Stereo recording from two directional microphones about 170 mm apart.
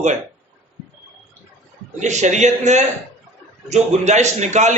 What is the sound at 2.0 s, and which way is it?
A man's voice, 45° right (ahead or behind).